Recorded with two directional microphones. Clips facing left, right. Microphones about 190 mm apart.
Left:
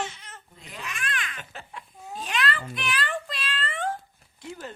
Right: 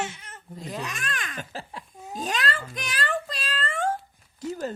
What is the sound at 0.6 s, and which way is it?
Babbling, 40° right (ahead or behind).